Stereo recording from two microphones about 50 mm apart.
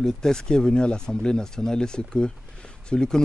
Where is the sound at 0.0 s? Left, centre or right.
Centre.